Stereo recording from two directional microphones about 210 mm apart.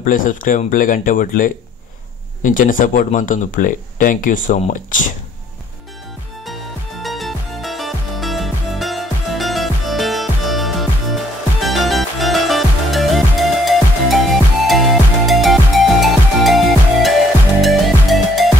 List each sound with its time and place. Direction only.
0.0 s speech: 40° left (ahead or behind)
6.4 s music: centre (ahead or behind)